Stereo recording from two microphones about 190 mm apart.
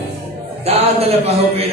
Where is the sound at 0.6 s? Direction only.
30° right (ahead or behind).